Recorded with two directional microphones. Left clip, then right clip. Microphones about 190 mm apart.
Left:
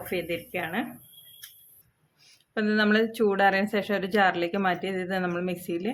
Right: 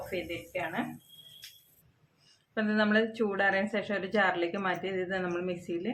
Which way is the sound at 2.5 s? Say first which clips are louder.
Left 4 dB; 60° left (ahead or behind).